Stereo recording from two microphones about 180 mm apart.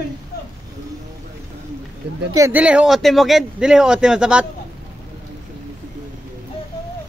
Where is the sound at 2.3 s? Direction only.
15° right (ahead or behind).